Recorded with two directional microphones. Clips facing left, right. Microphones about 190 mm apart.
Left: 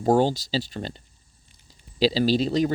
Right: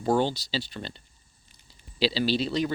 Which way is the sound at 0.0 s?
40° left (ahead or behind).